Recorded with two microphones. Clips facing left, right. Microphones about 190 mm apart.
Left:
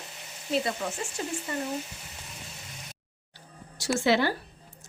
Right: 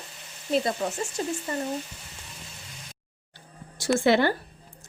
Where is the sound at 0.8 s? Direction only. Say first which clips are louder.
Right 4 dB; 35° right (ahead or behind).